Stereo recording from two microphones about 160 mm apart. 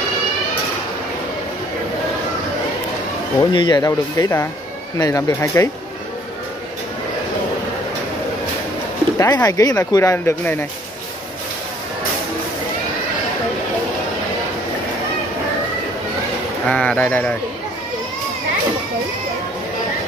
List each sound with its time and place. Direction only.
3.3 s speech: 25° left (ahead or behind)
9.2 s speech: 20° left (ahead or behind)
16.6 s speech: 5° left (ahead or behind)